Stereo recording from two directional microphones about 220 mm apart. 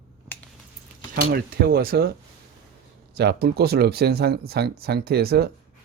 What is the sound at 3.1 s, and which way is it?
Speech, 45° right (ahead or behind).